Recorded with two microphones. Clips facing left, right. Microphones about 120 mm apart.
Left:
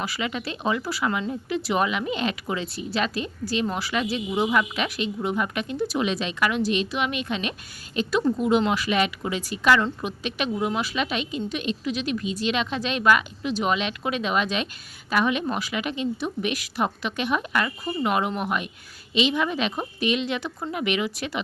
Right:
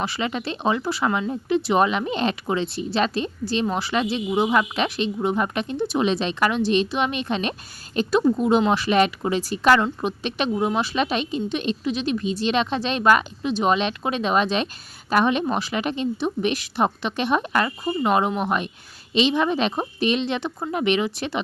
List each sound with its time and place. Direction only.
0.0 s a woman's voice: 30° right (ahead or behind)